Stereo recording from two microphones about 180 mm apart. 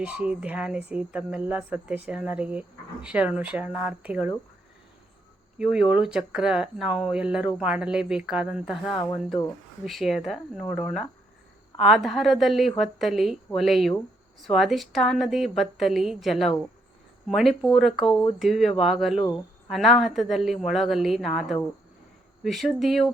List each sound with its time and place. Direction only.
0.0 s speech: 5° right (ahead or behind)
5.5 s speech: 5° right (ahead or behind)